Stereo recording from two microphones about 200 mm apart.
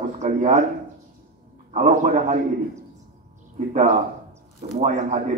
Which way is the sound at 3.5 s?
35° right (ahead or behind).